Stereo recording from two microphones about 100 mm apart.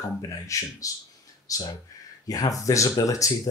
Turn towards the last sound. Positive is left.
turn(degrees=35)  # may be behind; listen again after turning